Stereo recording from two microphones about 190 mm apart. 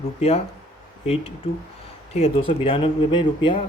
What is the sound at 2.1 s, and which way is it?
Speech, 30° left (ahead or behind).